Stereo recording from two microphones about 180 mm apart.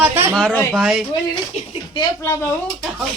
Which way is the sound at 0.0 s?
10° right (ahead or behind).